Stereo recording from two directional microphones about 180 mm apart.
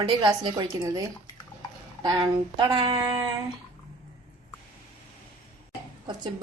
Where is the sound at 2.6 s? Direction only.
25° right (ahead or behind).